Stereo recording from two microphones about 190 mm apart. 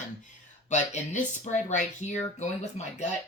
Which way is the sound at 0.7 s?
40° left (ahead or behind).